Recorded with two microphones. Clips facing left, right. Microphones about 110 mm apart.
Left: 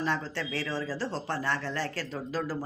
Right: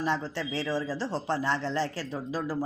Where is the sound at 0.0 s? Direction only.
15° right (ahead or behind).